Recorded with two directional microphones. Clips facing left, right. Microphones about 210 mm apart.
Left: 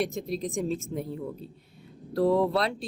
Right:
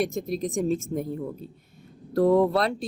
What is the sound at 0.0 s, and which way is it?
A woman's voice, 45° right (ahead or behind).